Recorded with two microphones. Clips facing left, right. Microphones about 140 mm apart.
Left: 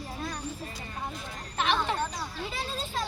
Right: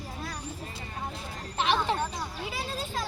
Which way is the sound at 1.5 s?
25° right (ahead or behind).